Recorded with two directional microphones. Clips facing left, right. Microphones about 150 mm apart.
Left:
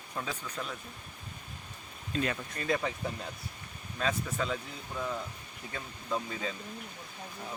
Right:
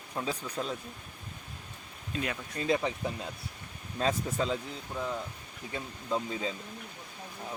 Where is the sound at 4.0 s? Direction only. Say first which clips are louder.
Right 3 dB; 30° right (ahead or behind).